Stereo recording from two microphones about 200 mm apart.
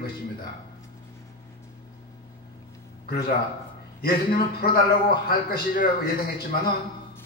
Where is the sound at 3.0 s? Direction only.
50° left (ahead or behind).